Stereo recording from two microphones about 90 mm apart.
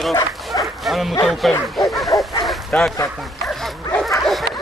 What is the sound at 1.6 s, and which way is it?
Bow-wow, centre (ahead or behind).